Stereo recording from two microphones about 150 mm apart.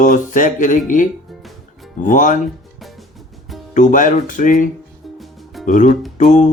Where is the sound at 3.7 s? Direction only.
55° left (ahead or behind).